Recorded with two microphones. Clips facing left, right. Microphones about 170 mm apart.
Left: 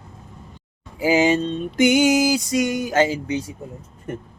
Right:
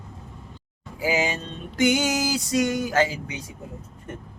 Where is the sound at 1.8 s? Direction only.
15° left (ahead or behind).